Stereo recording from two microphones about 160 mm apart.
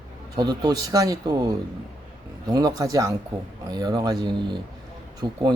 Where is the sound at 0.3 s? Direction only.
25° right (ahead or behind).